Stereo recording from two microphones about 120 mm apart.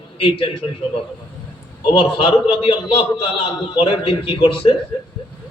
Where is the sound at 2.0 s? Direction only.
45° left (ahead or behind).